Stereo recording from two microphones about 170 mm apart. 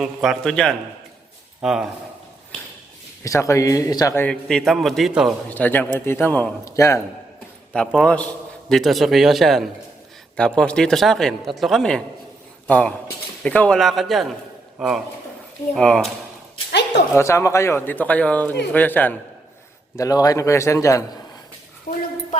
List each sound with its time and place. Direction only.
0.0 s a man's voice: centre (ahead or behind)
3.2 s a man's voice: 20° left (ahead or behind); by 5.3 s centre (ahead or behind)
5.5 s a man's voice: 10° left (ahead or behind)
7.7 s a man's voice: 5° left (ahead or behind)
17.2 s a man's voice: 15° left (ahead or behind)
20.0 s a man's voice: 20° left (ahead or behind)
21.9 s a sound: 50° left (ahead or behind)